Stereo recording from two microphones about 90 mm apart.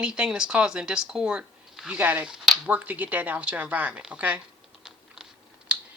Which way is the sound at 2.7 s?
20° right (ahead or behind).